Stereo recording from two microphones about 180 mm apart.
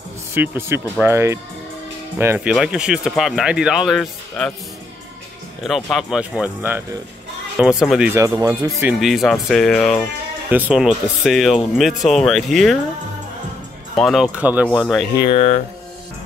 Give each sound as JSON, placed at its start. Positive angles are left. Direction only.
{"t": 0.3, "sound": "speech", "side_deg": -10}
{"t": 5.7, "sound": "speech", "side_deg": 0}
{"t": 8.1, "sound": "speech", "side_deg": -15}
{"t": 8.8, "sound": "speech", "side_deg": 0}
{"t": 13.9, "sound": "speech", "side_deg": 0}
{"t": 15.2, "sound": "speech", "side_deg": 35}